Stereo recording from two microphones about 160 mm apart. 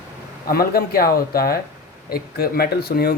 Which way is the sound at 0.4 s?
70° left (ahead or behind).